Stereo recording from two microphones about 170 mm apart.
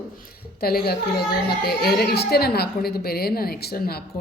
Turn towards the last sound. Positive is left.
turn(degrees=65)  # may be behind; listen again after turning